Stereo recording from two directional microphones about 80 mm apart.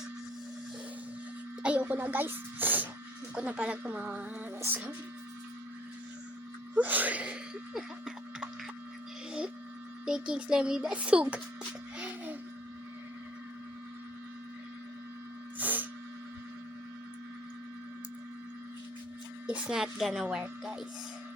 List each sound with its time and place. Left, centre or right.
1.6 s speech: centre
6.7 s sneeze: right
10.1 s speech: centre
11.9 s music: centre
15.5 s snort: right
19.6 s speech: centre